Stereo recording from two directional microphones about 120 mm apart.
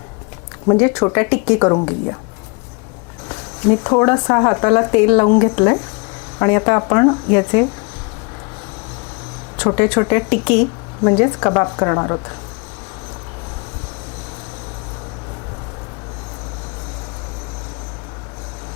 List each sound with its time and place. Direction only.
0.7 s speech: 25° left (ahead or behind)
3.2 s speech: 25° left (ahead or behind)
9.6 s speech: 20° left (ahead or behind)